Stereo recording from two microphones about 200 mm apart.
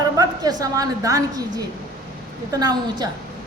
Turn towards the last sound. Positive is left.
turn(degrees=-20)  # may be behind; listen again after turning